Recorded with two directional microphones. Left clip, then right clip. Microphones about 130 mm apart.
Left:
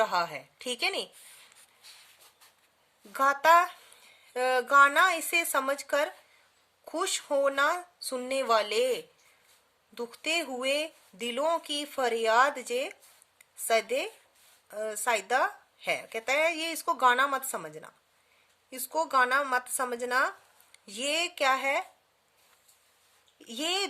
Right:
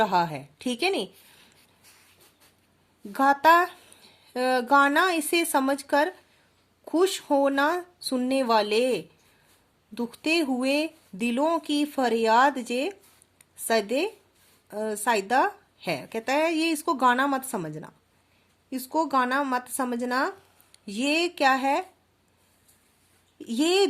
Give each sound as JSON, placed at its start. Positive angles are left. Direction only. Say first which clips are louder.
{"t": 0.0, "sound": "speech", "louder": "right 4 dB", "side_deg": -35}
{"t": 3.1, "sound": "speech", "louder": "right 3 dB", "side_deg": -35}
{"t": 23.4, "sound": "speech", "louder": "right 8 dB", "side_deg": -40}